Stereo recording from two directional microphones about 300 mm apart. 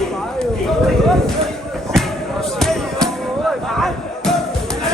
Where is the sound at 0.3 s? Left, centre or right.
Centre.